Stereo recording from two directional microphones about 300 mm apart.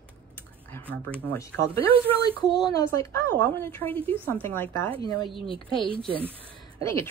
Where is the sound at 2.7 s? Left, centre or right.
Centre.